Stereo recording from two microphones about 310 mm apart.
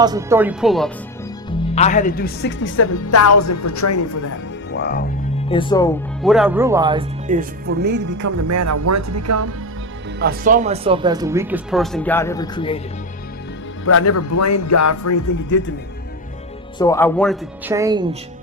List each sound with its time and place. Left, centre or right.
0.0 s speech: centre
1.5 s speech: left
4.7 s music: left
5.5 s speech: centre
6.2 s speech: centre
7.3 s speech: right
8.2 s speech: right
10.2 s speech: right; by 12.8 s centre
13.8 s speech: left
16.7 s speech: centre
17.7 s speech: centre